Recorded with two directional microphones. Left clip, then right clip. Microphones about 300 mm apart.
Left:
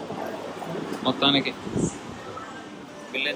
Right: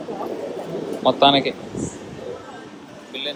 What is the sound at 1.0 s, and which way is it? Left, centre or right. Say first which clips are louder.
Speech: right 7 dB; centre.